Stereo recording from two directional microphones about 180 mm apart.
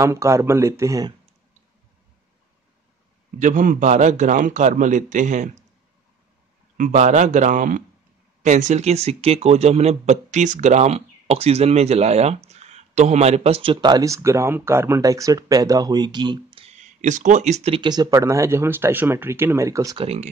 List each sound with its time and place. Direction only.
0.0 s speech: 15° right (ahead or behind)
3.3 s a man's voice: 45° right (ahead or behind)
6.8 s a man's voice: 40° right (ahead or behind); by 20.1 s 20° right (ahead or behind)